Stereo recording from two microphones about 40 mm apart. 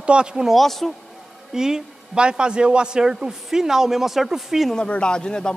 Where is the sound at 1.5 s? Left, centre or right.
Centre.